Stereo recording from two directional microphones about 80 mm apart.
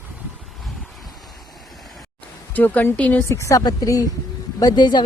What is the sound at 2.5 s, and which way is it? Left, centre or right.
Speech, left.